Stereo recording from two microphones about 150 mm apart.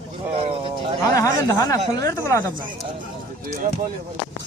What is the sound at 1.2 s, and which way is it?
Speech, 20° left (ahead or behind).